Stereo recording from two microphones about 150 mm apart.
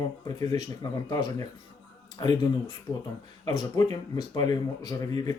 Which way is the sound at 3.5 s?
25° left (ahead or behind).